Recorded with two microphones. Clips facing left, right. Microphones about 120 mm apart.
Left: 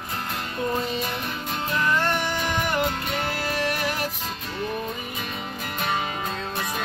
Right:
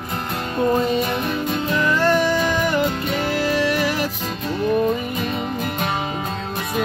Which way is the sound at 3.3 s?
90° right.